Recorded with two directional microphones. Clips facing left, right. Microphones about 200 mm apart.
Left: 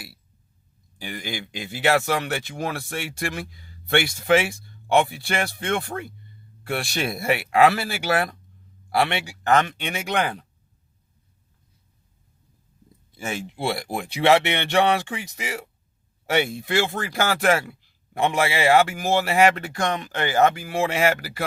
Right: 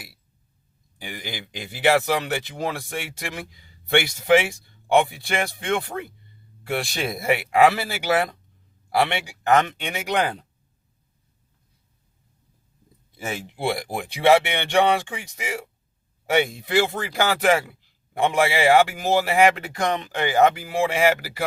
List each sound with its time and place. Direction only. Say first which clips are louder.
1.0 s speech: left 3 dB; 15° right (ahead or behind)
13.2 s speech: right 1 dB; 15° right (ahead or behind)
16.3 s speech: right 2 dB; 15° right (ahead or behind)